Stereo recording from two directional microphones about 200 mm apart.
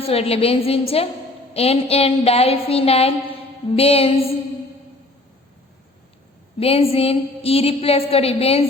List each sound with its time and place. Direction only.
0.1 s a woman's voice: 30° left (ahead or behind)
6.6 s a woman's voice: 30° left (ahead or behind)